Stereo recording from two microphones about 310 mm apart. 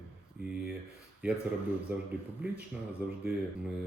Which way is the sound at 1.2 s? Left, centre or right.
Centre.